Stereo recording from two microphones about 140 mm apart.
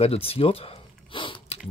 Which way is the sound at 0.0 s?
45° left (ahead or behind).